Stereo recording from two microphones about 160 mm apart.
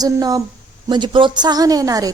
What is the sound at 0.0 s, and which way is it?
A woman's voice, 25° right (ahead or behind).